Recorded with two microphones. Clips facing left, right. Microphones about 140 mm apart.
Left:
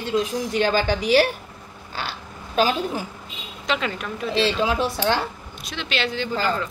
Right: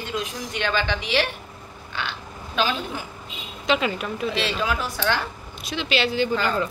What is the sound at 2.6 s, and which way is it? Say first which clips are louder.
Speech: left 4 dB; 40° left (ahead or behind).